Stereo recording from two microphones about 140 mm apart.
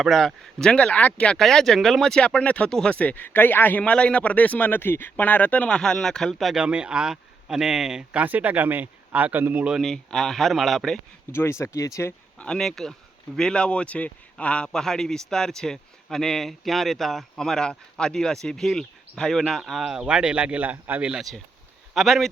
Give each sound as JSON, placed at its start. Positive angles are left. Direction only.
{"t": 0.0, "sound": "speech", "side_deg": 0}
{"t": 11.3, "sound": "speech", "side_deg": 15}
{"t": 12.4, "sound": "speech", "side_deg": 5}